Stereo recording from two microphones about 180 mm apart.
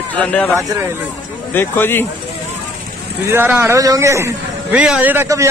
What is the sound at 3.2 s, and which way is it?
A man's voice, 10° right (ahead or behind).